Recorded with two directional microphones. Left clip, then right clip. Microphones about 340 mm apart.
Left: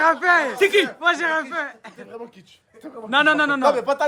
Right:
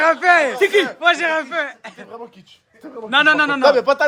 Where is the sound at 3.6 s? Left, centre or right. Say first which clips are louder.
Right 5 dB; right.